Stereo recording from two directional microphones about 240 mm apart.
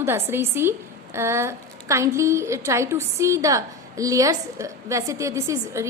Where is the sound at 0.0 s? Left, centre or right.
Centre.